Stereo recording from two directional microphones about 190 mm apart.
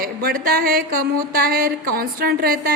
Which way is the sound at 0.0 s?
55° right (ahead or behind).